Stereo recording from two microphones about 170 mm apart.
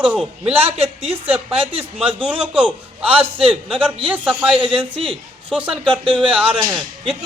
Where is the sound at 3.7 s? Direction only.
30° right (ahead or behind).